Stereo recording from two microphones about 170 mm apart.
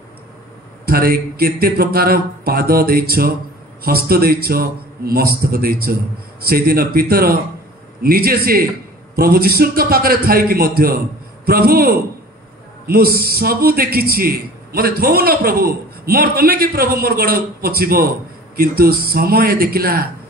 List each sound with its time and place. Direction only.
0.8 s a man's voice: 60° right (ahead or behind)